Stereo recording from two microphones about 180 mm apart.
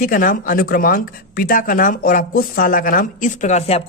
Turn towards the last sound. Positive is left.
turn(degrees=35)  # may be behind; listen again after turning